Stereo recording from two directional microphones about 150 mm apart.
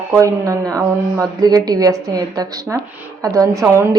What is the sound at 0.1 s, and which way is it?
Speech, 20° right (ahead or behind).